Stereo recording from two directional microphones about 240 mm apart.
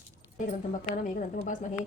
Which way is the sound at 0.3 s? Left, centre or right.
Left.